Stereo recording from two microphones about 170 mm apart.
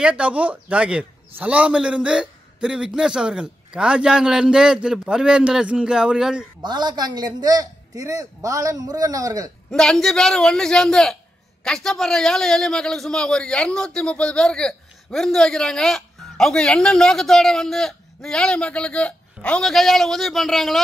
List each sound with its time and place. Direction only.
0.0 s a man's voice: 5° right (ahead or behind)
6.6 s a man's voice: 25° right (ahead or behind)
9.7 s a man's voice: 5° left (ahead or behind)